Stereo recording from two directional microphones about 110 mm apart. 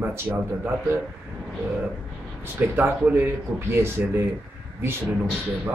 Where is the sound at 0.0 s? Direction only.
25° right (ahead or behind).